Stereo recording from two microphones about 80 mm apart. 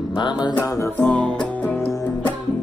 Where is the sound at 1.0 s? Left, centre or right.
Centre.